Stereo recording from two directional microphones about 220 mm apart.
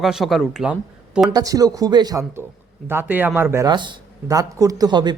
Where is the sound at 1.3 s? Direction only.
15° right (ahead or behind).